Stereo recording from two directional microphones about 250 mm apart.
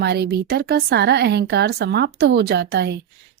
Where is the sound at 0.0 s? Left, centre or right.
Right.